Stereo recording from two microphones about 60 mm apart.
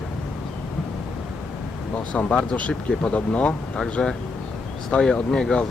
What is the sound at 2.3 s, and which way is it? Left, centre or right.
Speech, centre.